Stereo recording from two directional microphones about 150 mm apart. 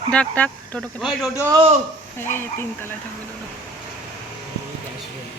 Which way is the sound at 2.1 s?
15° left (ahead or behind).